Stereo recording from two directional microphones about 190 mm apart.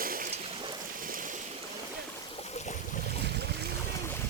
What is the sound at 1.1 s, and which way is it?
Boat, 45° right (ahead or behind).